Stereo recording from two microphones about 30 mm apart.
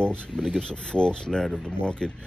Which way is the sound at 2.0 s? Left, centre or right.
Centre.